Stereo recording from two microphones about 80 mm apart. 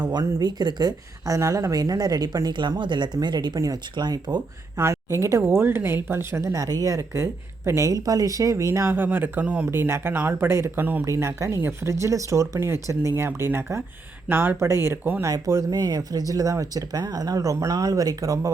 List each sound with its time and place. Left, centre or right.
0.1 s speech: right
3.9 s speech: right
4.8 s speech: right
8.0 s speech: right; by 9.6 s centre
9.7 s speech: right
11.0 s speech: right
15.2 s speech: right